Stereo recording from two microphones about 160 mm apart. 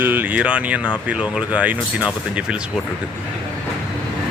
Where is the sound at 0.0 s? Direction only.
10° right (ahead or behind).